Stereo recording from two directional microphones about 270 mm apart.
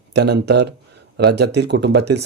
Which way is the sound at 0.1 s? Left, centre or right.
Right.